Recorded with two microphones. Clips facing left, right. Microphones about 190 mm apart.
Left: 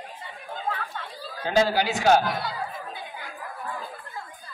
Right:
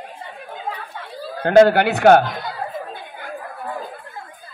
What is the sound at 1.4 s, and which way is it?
Speech, 60° right (ahead or behind).